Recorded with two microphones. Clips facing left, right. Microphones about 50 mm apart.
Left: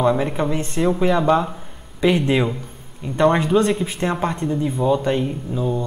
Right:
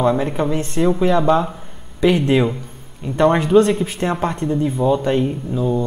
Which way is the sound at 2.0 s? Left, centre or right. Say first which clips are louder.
Right 2 dB; left.